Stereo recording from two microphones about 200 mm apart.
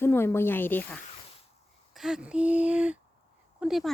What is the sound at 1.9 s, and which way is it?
Speech, centre (ahead or behind).